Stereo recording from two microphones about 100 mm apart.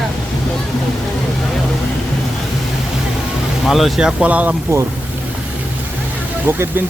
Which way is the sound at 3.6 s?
Centre (ahead or behind).